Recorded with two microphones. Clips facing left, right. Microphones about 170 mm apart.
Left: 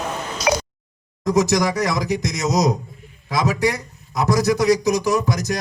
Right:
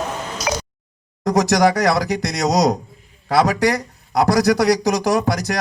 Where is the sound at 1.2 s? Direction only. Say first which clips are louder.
Right 2 dB; 65° right (ahead or behind).